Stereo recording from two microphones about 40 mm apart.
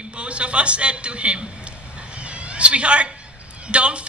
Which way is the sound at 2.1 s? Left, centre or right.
Right.